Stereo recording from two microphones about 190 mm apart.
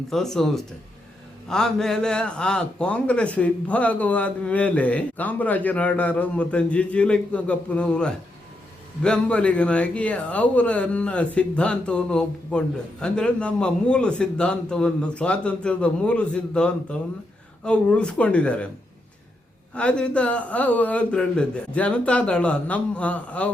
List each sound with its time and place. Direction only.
0.1 s a man's voice: centre (ahead or behind)
19.7 s a man's voice: 5° left (ahead or behind)